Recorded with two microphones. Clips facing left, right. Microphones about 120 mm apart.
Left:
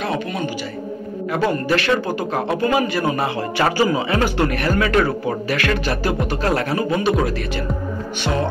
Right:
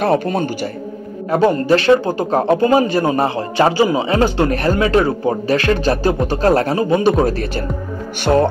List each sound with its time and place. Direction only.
0.0 s speech: 45° right (ahead or behind)
1.5 s speech: 30° right (ahead or behind)
8.2 s speech: 45° right (ahead or behind)